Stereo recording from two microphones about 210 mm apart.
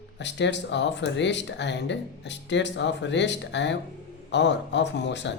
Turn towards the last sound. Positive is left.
turn(degrees=55)  # may be behind; listen again after turning